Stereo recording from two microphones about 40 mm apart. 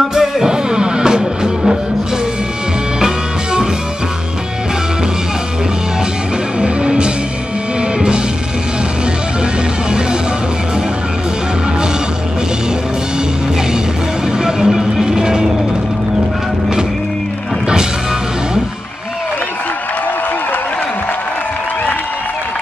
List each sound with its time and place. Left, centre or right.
0.1 s music: centre
6.6 s music: right
14.7 s music: centre